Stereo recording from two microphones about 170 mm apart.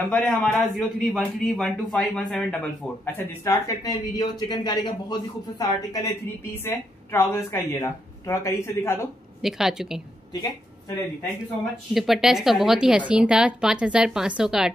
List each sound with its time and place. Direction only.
0.1 s a man's voice: 5° left (ahead or behind)
9.4 s a woman's voice: centre (ahead or behind)
11.9 s a woman's voice: centre (ahead or behind)